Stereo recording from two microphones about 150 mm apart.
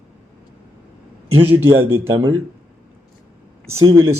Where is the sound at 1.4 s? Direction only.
15° right (ahead or behind).